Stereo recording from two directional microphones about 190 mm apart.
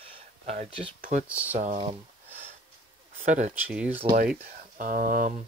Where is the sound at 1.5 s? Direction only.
35° right (ahead or behind).